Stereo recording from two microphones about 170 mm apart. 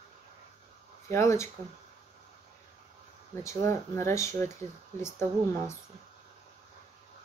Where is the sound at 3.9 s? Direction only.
15° left (ahead or behind).